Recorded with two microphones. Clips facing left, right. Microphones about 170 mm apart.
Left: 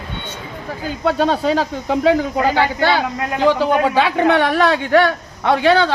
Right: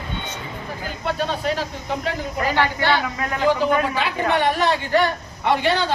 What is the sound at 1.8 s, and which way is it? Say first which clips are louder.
Speech: left 10 dB; 90° left.